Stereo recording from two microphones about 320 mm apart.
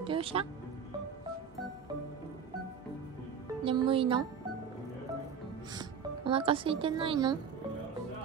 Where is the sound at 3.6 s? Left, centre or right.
Centre.